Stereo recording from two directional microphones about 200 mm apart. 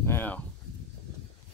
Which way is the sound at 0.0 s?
10° left (ahead or behind).